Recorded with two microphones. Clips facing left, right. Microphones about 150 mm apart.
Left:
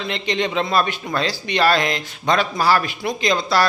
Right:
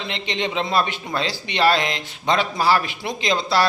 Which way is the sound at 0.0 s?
25° right (ahead or behind).